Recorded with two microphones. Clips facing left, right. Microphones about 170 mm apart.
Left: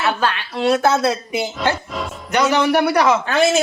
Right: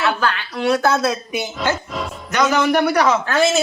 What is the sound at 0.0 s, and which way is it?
A woman's voice, 25° left (ahead or behind).